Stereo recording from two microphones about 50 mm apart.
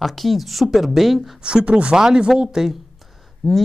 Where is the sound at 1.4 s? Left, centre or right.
Centre.